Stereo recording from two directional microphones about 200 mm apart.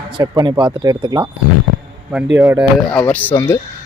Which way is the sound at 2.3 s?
10° right (ahead or behind).